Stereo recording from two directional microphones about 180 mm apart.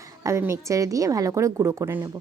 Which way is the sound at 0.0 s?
15° right (ahead or behind).